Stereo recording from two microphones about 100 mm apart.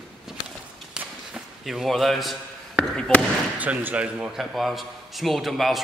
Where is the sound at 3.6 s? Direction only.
15° right (ahead or behind).